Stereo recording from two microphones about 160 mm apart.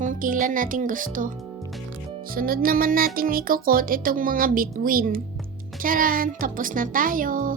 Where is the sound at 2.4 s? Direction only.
65° right (ahead or behind).